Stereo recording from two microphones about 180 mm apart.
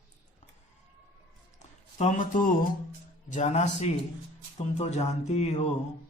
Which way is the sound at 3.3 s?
40° left (ahead or behind).